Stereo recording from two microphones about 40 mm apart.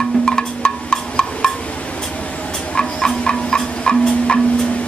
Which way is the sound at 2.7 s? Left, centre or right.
Left.